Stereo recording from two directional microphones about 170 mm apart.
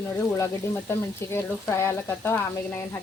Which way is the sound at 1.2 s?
15° left (ahead or behind).